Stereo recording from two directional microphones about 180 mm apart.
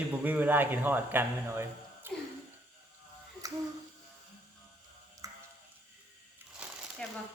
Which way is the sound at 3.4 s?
20° right (ahead or behind).